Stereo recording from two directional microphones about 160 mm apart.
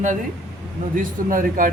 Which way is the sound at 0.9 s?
60° right (ahead or behind).